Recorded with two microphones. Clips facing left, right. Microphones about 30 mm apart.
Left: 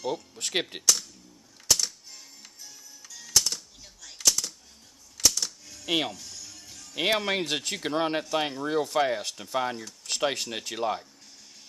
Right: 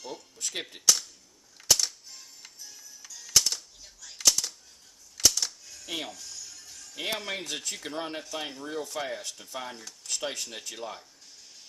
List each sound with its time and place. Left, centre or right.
0.4 s speech: left
1.7 s music: centre
3.3 s music: centre
4.2 s typewriter: centre
5.9 s speech: left
6.1 s music: centre
7.0 s speech: left
10.0 s a sound: left
10.6 s speech: left